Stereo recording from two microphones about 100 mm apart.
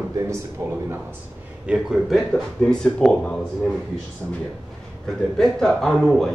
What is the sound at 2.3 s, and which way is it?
Speech, 5° left (ahead or behind).